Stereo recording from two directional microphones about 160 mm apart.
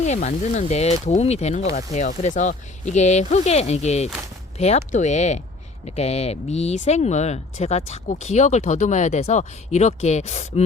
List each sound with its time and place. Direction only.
0.0 s speech: 45° left (ahead or behind)